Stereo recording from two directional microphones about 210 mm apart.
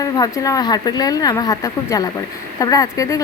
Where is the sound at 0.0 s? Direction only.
15° left (ahead or behind).